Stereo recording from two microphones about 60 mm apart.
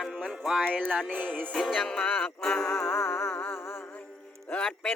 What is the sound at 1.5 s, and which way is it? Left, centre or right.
Music, centre.